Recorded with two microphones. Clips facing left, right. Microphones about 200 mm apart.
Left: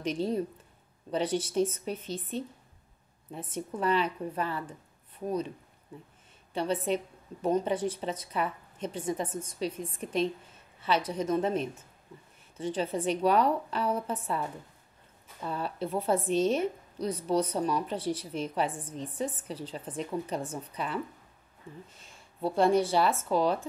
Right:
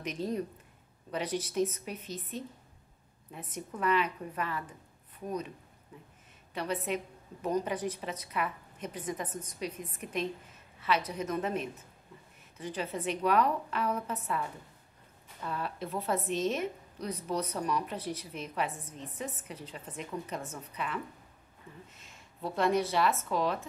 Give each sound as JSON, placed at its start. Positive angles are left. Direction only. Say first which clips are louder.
{"t": 0.0, "sound": "a woman's voice", "louder": "left 4 dB", "side_deg": 30}
{"t": 6.5, "sound": "a woman's voice", "louder": "left 4 dB", "side_deg": 30}
{"t": 15.4, "sound": "a woman's voice", "louder": "left 3 dB", "side_deg": 30}